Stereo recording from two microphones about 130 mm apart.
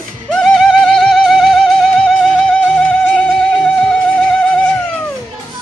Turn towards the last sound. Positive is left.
turn(degrees=10)  # may be behind; listen again after turning